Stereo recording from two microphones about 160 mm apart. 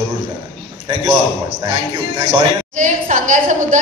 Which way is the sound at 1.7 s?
35° right (ahead or behind).